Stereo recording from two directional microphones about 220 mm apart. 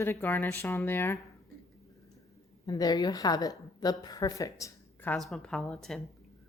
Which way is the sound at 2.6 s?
15° left (ahead or behind).